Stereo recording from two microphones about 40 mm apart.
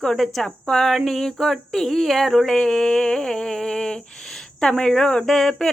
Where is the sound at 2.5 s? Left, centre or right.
Centre.